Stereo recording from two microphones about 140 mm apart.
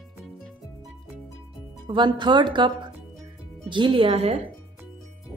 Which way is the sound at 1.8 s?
35° right (ahead or behind).